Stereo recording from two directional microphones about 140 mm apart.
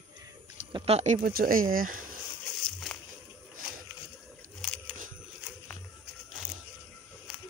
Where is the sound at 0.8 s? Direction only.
50° right (ahead or behind).